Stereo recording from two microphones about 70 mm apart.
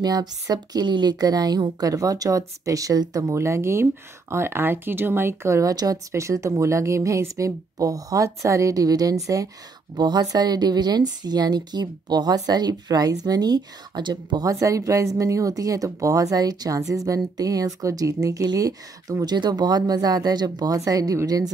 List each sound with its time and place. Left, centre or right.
0.0 s a woman's voice: right
6.1 s speech: right
9.9 s a woman's voice: right
10.2 s a woman's voice: right
14.5 s a woman's voice: right
19.2 s a woman's voice: right